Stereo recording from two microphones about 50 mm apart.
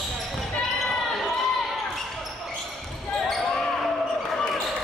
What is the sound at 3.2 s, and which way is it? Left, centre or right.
Basketball bounce, centre.